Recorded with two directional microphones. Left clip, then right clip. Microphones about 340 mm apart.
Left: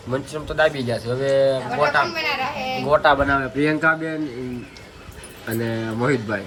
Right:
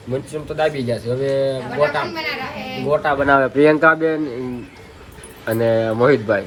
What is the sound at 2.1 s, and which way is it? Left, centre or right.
Speech, centre.